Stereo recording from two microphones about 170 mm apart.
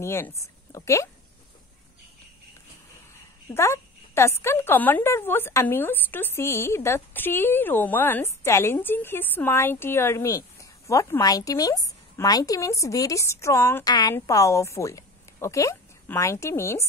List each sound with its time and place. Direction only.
0.0 s a woman's voice: 15° left (ahead or behind)
3.5 s a woman's voice: 15° left (ahead or behind)